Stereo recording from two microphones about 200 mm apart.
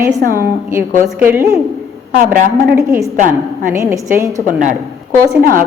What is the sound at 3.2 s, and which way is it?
Speech, 45° right (ahead or behind).